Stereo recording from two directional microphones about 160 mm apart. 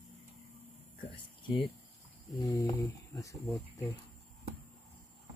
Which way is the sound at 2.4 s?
25° left (ahead or behind).